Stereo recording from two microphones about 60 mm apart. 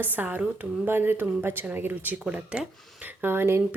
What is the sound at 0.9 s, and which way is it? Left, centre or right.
Speech, right.